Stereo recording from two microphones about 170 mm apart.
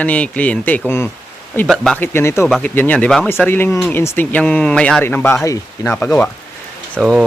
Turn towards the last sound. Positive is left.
turn(degrees=0)  # may be behind; listen again after turning